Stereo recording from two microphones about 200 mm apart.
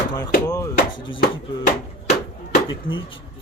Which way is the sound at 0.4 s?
15° left (ahead or behind).